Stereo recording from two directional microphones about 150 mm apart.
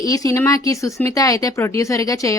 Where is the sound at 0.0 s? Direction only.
20° left (ahead or behind).